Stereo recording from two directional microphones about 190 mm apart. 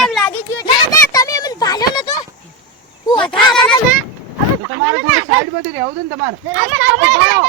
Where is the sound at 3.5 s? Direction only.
5° left (ahead or behind).